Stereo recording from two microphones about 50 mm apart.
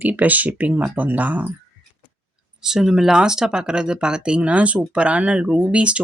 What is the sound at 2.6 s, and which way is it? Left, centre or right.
Speech, centre.